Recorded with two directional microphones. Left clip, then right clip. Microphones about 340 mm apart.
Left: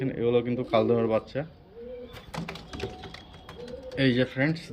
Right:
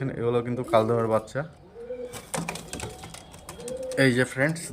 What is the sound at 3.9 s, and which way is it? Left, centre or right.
Speech, centre.